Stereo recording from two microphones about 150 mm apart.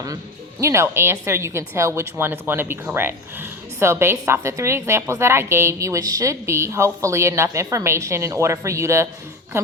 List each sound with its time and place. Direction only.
0.6 s a woman's voice: 20° right (ahead or behind)